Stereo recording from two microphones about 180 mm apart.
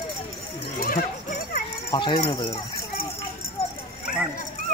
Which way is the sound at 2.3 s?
25° left (ahead or behind).